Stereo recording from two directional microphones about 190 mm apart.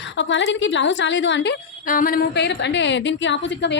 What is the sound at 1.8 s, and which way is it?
A woman's voice, 45° left (ahead or behind).